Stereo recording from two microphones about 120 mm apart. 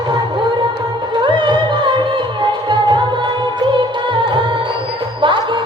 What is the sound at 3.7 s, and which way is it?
Music, 45° right (ahead or behind).